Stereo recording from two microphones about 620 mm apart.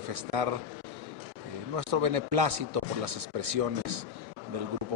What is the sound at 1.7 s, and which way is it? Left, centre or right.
A man's voice, right.